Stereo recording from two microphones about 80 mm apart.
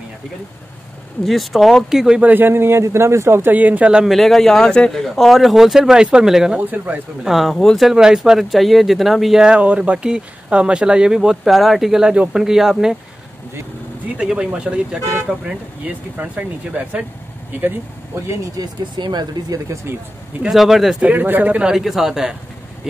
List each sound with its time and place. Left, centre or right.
1.2 s speech: centre
2.2 s a man's voice: right
3.5 s speech: centre
4.0 s speech: centre
14.1 s speech: centre
16.2 s speech: centre
18.3 s speech: right
18.9 s speech: right
19.7 s a man's voice: right
20.4 s speech: centre
21.0 s speech: right